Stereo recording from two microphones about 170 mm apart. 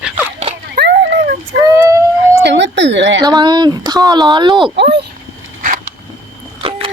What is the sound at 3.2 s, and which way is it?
Speech, 25° right (ahead or behind).